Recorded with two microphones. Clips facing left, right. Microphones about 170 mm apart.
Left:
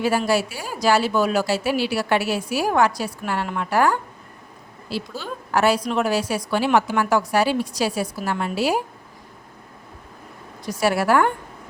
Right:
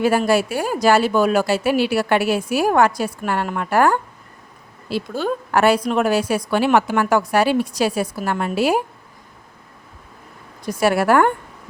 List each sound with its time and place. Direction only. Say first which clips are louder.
0.0 s a woman's voice: right 4 dB; 55° right (ahead or behind)
10.7 s a woman's voice: right 3 dB; 55° right (ahead or behind)